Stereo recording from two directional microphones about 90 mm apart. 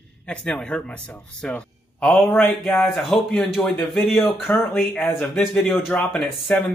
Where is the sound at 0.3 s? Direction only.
10° left (ahead or behind).